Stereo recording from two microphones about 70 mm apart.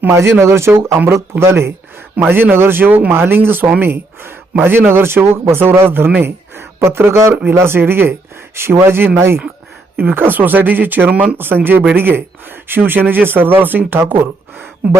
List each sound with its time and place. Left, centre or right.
0.0 s speech: right; by 11.3 s centre
11.3 s speech: right